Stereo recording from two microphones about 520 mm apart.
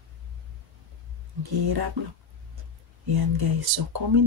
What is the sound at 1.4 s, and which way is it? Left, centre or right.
Speech, right.